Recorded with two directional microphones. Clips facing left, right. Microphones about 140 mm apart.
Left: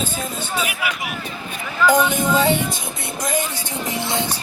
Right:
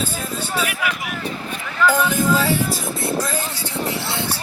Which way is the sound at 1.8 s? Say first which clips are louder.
Left 2 dB; centre (ahead or behind).